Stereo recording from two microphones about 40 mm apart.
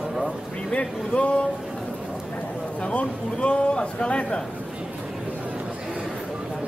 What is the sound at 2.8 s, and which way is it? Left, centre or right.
A man's voice, left.